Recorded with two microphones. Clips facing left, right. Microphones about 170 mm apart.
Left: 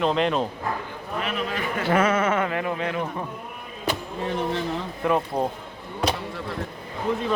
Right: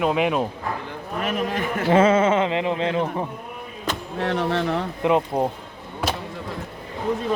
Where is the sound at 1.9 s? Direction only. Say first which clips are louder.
Right 5 dB; 25° right (ahead or behind).